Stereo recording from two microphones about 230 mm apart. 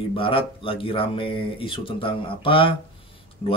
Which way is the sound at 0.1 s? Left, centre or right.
Left.